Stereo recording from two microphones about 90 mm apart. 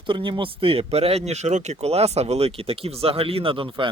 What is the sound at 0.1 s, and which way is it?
Speech, 65° right (ahead or behind).